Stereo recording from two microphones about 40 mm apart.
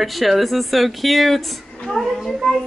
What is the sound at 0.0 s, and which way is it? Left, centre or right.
A woman's voice, centre.